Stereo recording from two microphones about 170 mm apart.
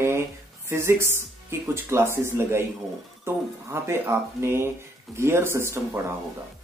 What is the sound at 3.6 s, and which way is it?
Speech, 15° right (ahead or behind).